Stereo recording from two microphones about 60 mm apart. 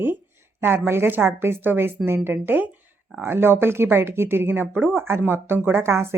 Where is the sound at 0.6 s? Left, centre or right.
Right.